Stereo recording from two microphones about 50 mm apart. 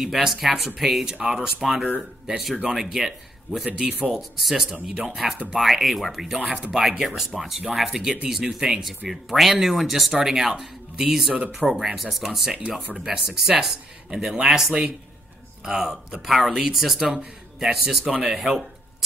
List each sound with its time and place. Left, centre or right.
0.0 s speech: centre
3.6 s speech: centre
4.2 s speech: centre
18.3 s a sound: centre